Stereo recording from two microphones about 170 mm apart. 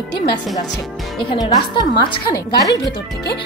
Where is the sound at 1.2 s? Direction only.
30° left (ahead or behind).